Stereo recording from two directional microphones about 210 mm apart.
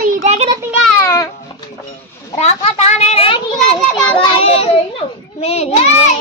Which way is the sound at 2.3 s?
30° left (ahead or behind).